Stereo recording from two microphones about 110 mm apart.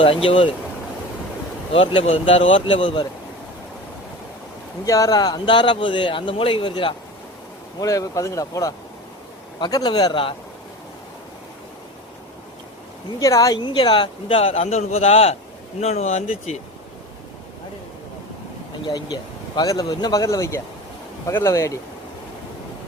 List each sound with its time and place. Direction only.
0.0 s a man's voice: 55° left (ahead or behind)
1.7 s speech: 60° left (ahead or behind)
4.9 s a man's voice: 30° left (ahead or behind); by 6.9 s 50° left (ahead or behind)
7.8 s speech: 30° left (ahead or behind); by 10.3 s 45° left (ahead or behind)
13.1 s speech: 30° left (ahead or behind); by 16.6 s 75° left (ahead or behind)
18.9 s speech: 40° left (ahead or behind)